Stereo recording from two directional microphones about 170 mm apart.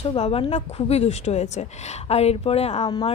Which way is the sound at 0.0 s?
35° left (ahead or behind).